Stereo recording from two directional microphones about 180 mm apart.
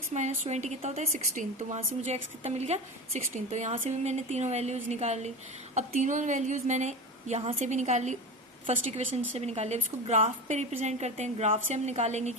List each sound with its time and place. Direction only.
0.1 s a woman's voice: 35° right (ahead or behind)